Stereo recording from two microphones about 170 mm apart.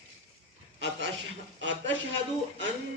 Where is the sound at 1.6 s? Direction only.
90° right.